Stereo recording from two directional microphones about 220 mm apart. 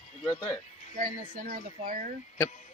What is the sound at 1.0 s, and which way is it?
Speech, 40° right (ahead or behind).